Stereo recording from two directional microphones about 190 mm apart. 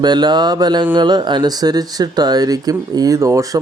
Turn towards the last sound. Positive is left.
turn(degrees=-15)  # may be behind; listen again after turning